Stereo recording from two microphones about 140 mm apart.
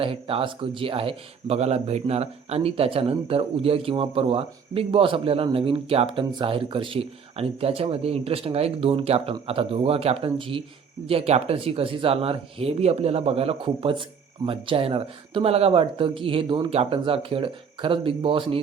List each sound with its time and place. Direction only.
0.0 s speech: 40° right (ahead or behind)